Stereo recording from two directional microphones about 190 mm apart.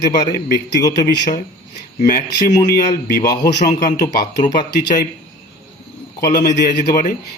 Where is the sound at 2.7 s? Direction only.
55° left (ahead or behind).